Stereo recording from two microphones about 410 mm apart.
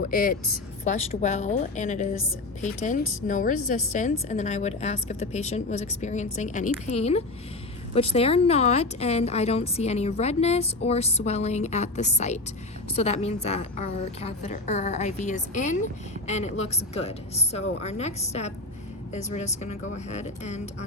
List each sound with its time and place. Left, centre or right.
0.1 s a woman's voice: centre